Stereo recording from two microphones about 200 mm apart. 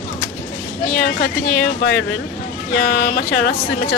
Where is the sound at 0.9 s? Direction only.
55° left (ahead or behind).